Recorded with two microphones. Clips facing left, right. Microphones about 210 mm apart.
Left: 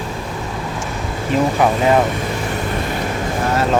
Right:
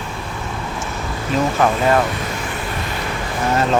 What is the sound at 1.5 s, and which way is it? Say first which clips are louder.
Speech: left 1 dB; 15° left (ahead or behind).